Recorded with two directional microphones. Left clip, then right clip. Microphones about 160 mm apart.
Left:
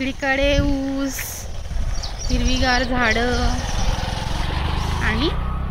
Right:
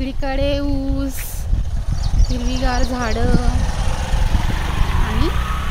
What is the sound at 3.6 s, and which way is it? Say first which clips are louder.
Vehicle: even; 35° left (ahead or behind).